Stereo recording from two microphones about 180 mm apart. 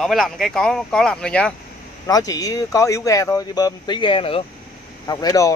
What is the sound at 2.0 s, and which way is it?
Speech, 20° left (ahead or behind).